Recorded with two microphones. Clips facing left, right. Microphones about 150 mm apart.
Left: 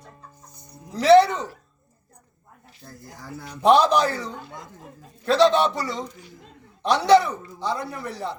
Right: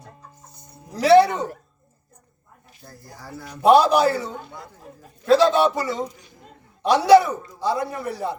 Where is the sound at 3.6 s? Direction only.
10° right (ahead or behind).